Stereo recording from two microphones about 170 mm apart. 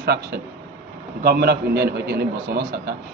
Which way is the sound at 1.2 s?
65° right (ahead or behind).